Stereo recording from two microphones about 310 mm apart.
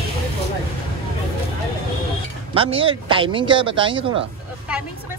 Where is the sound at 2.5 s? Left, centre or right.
Centre.